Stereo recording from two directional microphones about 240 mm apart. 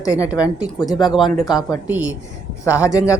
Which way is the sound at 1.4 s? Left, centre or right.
Centre.